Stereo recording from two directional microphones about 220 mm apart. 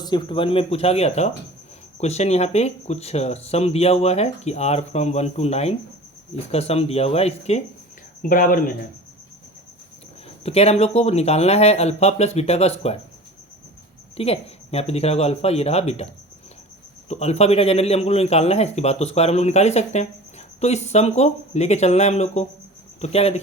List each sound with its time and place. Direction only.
0.0 s speech: 20° left (ahead or behind)
8.2 s speech: 40° left (ahead or behind)
10.4 s speech: 25° left (ahead or behind)
14.2 s speech: 25° left (ahead or behind)
17.1 s speech: 30° left (ahead or behind)